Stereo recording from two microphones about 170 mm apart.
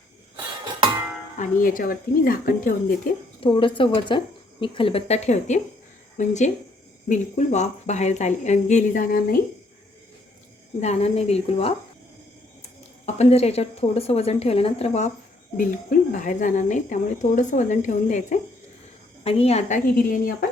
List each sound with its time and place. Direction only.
1.4 s speech: 55° left (ahead or behind)
3.4 s a woman's voice: 30° left (ahead or behind); by 9.4 s 50° left (ahead or behind)
10.8 s a woman's voice: 40° left (ahead or behind)
13.1 s a woman's voice: 40° left (ahead or behind)
15.5 s speech: 50° left (ahead or behind)
19.2 s a woman's voice: 35° left (ahead or behind); by 20.3 s 50° left (ahead or behind)